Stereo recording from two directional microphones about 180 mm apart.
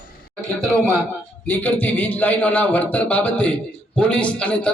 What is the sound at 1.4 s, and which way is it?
A man's voice, 10° left (ahead or behind).